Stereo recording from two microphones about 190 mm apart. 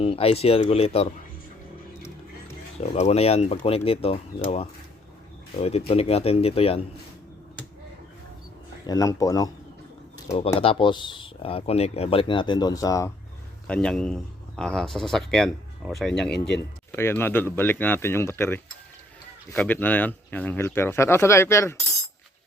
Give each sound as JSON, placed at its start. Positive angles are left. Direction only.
{"t": 0.0, "sound": "speech", "side_deg": 30}
{"t": 2.8, "sound": "speech", "side_deg": 35}
{"t": 8.9, "sound": "speech", "side_deg": 20}
{"t": 10.3, "sound": "speech", "side_deg": 30}
{"t": 13.7, "sound": "speech", "side_deg": 5}